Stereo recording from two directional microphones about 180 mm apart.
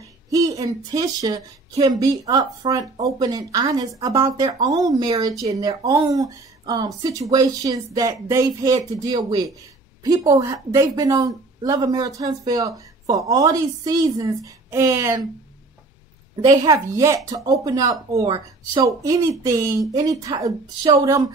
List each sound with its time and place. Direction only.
0.3 s a woman's voice: 20° right (ahead or behind)
16.4 s speech: 20° right (ahead or behind)